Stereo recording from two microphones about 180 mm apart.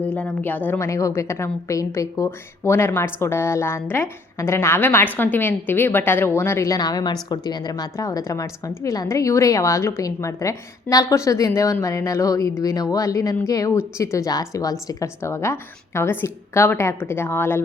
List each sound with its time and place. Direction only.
0.1 s a woman's voice: 10° left (ahead or behind)